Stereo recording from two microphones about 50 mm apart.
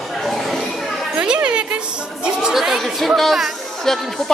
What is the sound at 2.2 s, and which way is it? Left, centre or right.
A woman's voice, centre.